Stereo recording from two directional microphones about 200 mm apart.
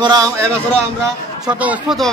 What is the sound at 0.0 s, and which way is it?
A man's voice, 20° right (ahead or behind).